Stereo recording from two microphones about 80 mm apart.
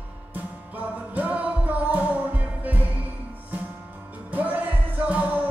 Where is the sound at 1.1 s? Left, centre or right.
Centre.